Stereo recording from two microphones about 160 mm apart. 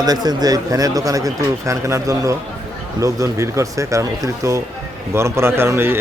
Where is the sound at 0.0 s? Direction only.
25° right (ahead or behind).